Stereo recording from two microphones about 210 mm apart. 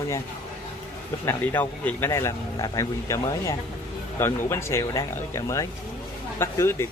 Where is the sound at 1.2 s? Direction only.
10° left (ahead or behind).